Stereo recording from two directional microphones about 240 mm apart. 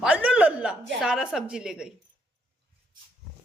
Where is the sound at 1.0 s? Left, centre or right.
Centre.